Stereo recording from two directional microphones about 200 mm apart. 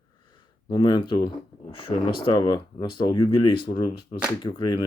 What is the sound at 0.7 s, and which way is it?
Speech, 20° left (ahead or behind).